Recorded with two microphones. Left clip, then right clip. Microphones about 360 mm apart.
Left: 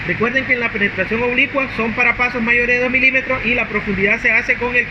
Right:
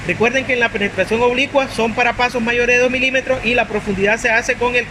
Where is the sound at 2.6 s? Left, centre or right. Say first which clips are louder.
Right 2 dB; right.